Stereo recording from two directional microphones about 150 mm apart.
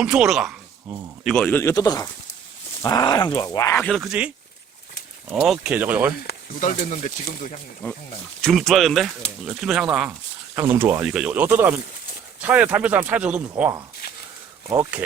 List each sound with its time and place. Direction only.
0.0 s a man's voice: 5° right (ahead or behind)
1.5 s speech: 15° left (ahead or behind)
5.3 s speech: 5° right (ahead or behind)
6.2 s speech: 60° left (ahead or behind)
8.4 s speech: 5° left (ahead or behind)
14.0 s a sound: 90° left
14.7 s speech: 10° right (ahead or behind)